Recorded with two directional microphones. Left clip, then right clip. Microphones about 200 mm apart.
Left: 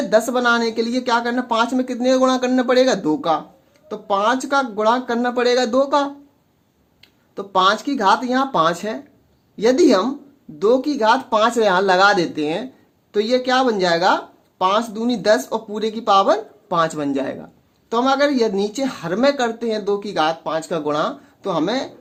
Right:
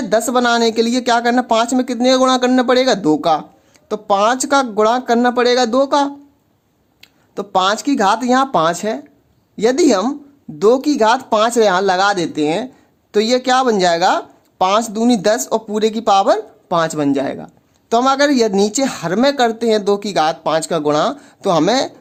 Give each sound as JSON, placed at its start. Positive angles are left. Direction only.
{"t": 0.1, "sound": "speech", "side_deg": -30}
{"t": 7.0, "sound": "speech", "side_deg": -40}
{"t": 13.1, "sound": "speech", "side_deg": -40}
{"t": 16.6, "sound": "speech", "side_deg": -25}
{"t": 17.8, "sound": "speech", "side_deg": -40}